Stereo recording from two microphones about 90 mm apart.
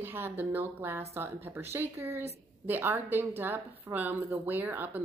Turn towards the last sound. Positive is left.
turn(degrees=-20)  # may be behind; listen again after turning